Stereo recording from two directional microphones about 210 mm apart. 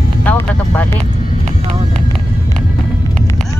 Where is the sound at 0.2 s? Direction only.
10° left (ahead or behind).